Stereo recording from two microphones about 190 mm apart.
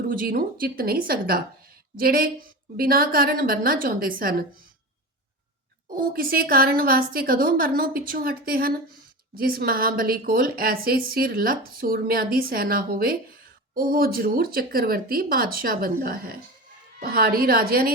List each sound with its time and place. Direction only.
0.1 s a woman's voice: 50° right (ahead or behind)
5.9 s a woman's voice: 50° right (ahead or behind)